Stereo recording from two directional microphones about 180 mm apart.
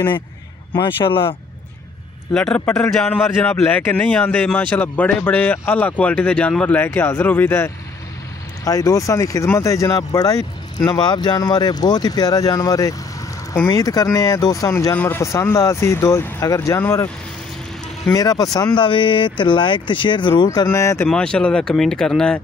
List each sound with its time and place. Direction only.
2.3 s a man's voice: 5° left (ahead or behind)
18.1 s speech: 20° left (ahead or behind)
21.1 s speech: 5° left (ahead or behind)